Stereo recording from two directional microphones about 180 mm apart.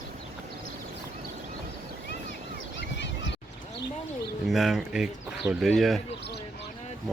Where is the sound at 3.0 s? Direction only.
85° left.